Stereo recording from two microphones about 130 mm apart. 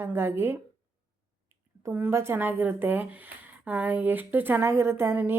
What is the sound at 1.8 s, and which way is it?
Speech, 15° right (ahead or behind).